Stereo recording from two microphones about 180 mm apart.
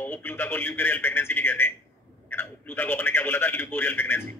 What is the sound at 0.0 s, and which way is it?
A man's voice, 10° left (ahead or behind).